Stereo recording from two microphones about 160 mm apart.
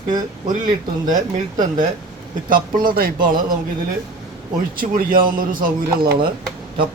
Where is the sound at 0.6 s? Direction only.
55° right (ahead or behind).